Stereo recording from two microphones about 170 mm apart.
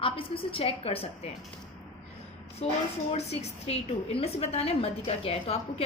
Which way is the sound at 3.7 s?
35° left (ahead or behind).